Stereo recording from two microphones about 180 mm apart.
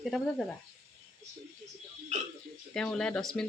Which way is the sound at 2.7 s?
5° left (ahead or behind).